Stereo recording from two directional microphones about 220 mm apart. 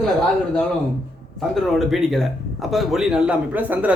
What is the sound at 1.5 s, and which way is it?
Speech, centre (ahead or behind).